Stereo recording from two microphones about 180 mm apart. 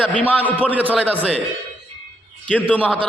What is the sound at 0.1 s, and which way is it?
Speech, 10° left (ahead or behind).